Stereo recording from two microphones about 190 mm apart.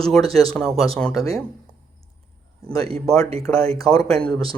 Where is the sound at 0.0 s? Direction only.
5° left (ahead or behind).